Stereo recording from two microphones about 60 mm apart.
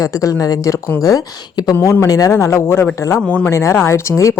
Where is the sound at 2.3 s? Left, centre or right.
Left.